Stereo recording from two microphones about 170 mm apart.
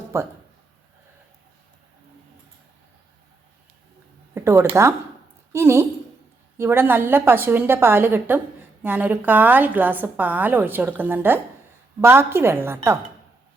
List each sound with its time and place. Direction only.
0.1 s a woman's voice: 15° right (ahead or behind)
4.4 s a sound: 15° right (ahead or behind)
4.7 s a woman's voice: 15° right (ahead or behind)